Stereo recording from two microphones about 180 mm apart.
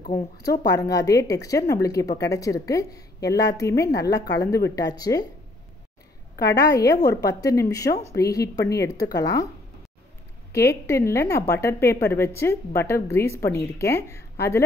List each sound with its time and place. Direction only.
0.1 s speech: 65° left (ahead or behind)
0.7 s a woman's voice: 20° left (ahead or behind)
6.3 s a woman's voice: 65° left (ahead or behind)
7.0 s a woman's voice: 20° left (ahead or behind)
10.5 s a woman's voice: 15° left (ahead or behind)